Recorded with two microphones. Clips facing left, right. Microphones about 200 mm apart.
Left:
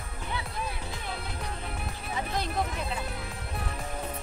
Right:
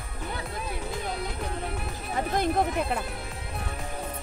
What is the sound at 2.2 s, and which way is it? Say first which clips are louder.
Speech: right 6 dB; 50° right (ahead or behind).